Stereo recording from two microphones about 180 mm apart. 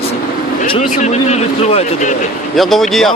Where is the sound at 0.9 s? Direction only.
40° left (ahead or behind).